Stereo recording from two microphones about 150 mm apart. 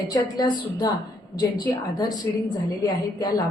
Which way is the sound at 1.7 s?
25° left (ahead or behind).